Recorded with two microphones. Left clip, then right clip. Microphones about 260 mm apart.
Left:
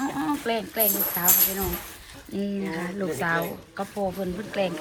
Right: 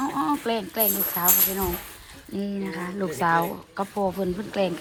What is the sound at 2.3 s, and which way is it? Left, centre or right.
Speech, right.